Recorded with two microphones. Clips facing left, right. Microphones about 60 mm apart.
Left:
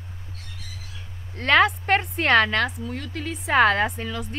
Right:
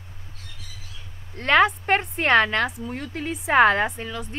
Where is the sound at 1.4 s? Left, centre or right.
Centre.